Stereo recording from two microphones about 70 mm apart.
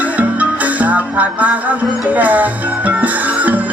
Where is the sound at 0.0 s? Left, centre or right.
Right.